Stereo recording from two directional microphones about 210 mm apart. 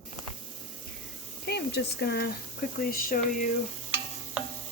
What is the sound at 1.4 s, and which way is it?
Speech, 50° left (ahead or behind).